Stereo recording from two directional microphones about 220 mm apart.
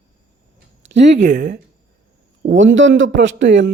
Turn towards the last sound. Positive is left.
turn(degrees=-55)  # may be behind; listen again after turning